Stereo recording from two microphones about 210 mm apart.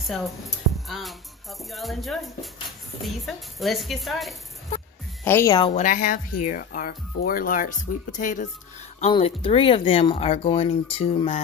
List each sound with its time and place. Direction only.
0.0 s a woman's voice: centre (ahead or behind)
5.2 s speech: 10° left (ahead or behind)
5.7 s speech: 35° left (ahead or behind)